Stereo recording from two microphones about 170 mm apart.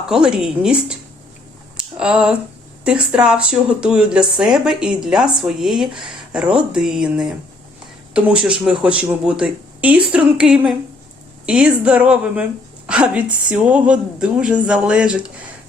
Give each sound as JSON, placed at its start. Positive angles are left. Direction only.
{"t": 0.1, "sound": "speech", "side_deg": -5}
{"t": 1.7, "sound": "a sound", "side_deg": -5}
{"t": 2.8, "sound": "speech", "side_deg": -5}